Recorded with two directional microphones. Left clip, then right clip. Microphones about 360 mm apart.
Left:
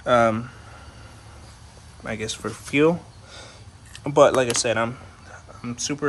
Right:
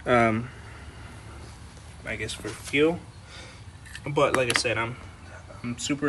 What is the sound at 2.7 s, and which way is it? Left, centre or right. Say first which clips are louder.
Speech: left 4 dB; left.